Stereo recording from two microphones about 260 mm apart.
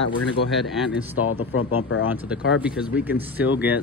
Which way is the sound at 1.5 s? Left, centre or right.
Left.